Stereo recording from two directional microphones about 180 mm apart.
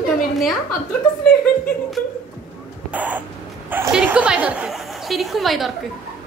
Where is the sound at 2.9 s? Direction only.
10° right (ahead or behind).